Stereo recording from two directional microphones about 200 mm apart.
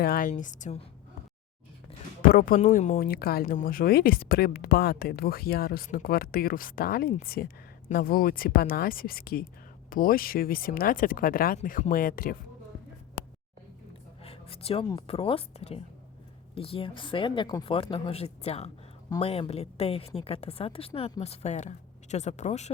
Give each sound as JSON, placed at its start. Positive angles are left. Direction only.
{"t": 0.0, "sound": "a woman's voice", "side_deg": 45}
{"t": 2.3, "sound": "speech", "side_deg": 45}
{"t": 14.3, "sound": "a sound", "side_deg": 30}
{"t": 14.8, "sound": "a woman's voice", "side_deg": 25}